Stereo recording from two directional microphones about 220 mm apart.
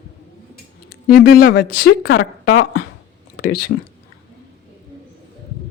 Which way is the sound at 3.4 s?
40° left (ahead or behind).